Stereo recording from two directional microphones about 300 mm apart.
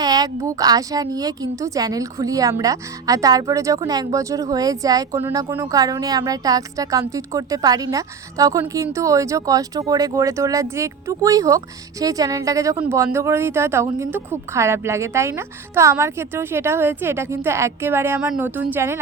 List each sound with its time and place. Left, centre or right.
0.0 s a woman's voice: centre